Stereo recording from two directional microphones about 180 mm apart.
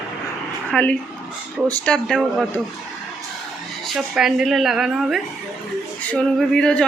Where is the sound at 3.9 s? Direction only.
5° right (ahead or behind).